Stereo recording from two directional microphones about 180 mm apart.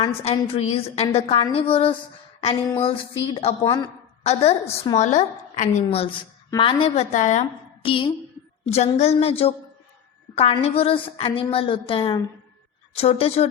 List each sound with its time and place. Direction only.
0.0 s a woman's voice: 35° left (ahead or behind)